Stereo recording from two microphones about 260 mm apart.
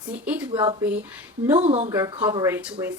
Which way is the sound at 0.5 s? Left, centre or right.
Centre.